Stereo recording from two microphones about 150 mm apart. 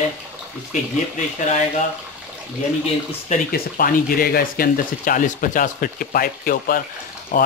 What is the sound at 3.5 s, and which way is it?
Speech, 70° left (ahead or behind).